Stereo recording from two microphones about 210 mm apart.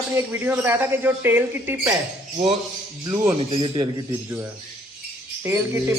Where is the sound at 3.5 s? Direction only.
25° right (ahead or behind).